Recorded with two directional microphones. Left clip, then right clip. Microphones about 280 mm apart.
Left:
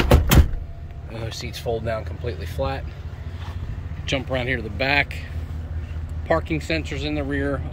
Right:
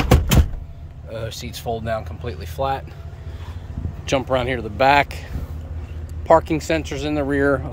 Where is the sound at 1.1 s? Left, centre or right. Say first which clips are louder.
Right 3 dB; centre.